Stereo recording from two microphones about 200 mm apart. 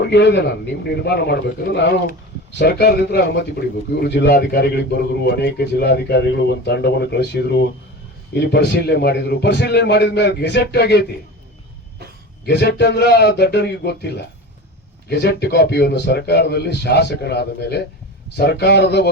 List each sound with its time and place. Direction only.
0.0 s a man's voice: 60° left (ahead or behind)
12.5 s a man's voice: 55° left (ahead or behind)